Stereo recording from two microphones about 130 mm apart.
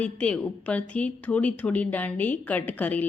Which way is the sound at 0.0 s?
10° left (ahead or behind).